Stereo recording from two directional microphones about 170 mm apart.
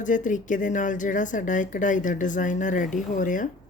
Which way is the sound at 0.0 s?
50° left (ahead or behind).